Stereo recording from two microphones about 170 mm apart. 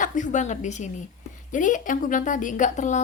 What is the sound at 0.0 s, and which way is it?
A woman's voice, 45° left (ahead or behind).